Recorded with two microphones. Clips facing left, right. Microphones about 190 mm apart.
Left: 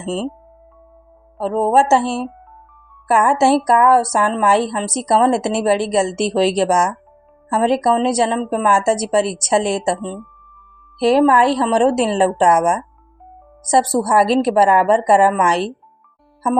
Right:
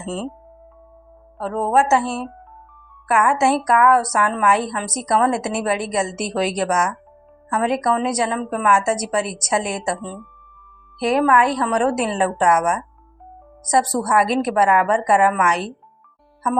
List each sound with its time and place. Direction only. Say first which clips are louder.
0.0 s speech: left 4 dB; 25° left (ahead or behind)
1.4 s a woman's voice: left 4 dB; 30° left (ahead or behind)